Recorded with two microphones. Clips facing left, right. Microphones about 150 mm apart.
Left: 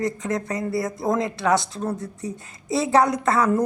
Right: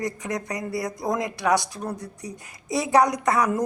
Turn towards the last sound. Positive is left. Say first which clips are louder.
# left 2 dB
turn(degrees=-15)  # may be behind; listen again after turning